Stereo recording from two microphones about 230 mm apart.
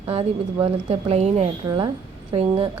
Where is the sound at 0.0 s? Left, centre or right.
Right.